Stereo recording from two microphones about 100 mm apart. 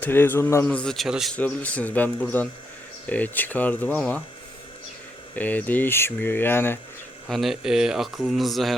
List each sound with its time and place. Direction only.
0.0 s speech: 20° left (ahead or behind)
0.6 s speech: 10° left (ahead or behind)
1.3 s speech: 15° left (ahead or behind)
5.3 s speech: 15° left (ahead or behind)
7.3 s speech: centre (ahead or behind)